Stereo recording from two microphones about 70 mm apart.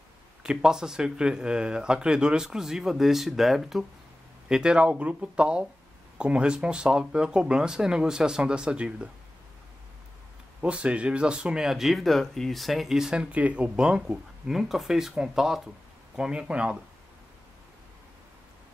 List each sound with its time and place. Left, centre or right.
0.4 s speech: centre
4.5 s speech: centre
10.6 s speech: centre